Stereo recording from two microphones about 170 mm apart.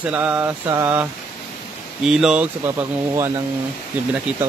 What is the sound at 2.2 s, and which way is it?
Speech, 5° right (ahead or behind).